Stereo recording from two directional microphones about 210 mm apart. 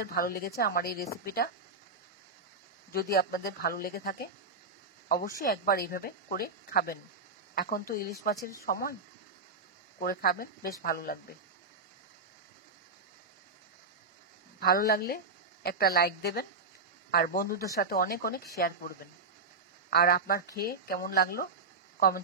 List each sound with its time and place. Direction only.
0.0 s speech: 45° left (ahead or behind)
2.9 s speech: 45° left (ahead or behind)
9.9 s speech: 45° left (ahead or behind)
14.6 s speech: 45° left (ahead or behind)